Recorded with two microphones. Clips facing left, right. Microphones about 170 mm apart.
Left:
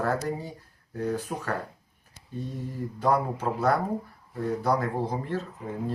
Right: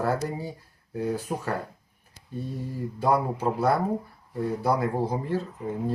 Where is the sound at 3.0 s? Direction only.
15° right (ahead or behind).